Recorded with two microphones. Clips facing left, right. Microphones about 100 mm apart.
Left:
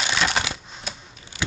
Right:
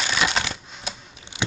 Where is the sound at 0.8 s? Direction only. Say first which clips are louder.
Right 2 dB; 25° right (ahead or behind).